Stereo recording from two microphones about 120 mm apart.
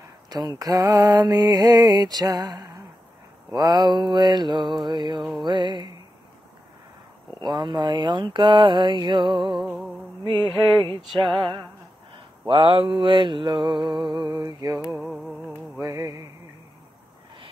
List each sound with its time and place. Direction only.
0.3 s mantra: 35° right (ahead or behind)
7.4 s mantra: 40° right (ahead or behind)
14.9 s music: centre (ahead or behind)
15.8 s music: 25° right (ahead or behind)